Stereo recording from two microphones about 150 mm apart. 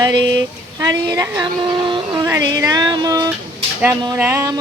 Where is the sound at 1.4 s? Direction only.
30° right (ahead or behind).